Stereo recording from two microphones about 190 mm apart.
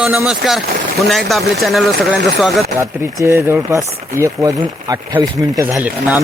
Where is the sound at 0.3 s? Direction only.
Centre (ahead or behind).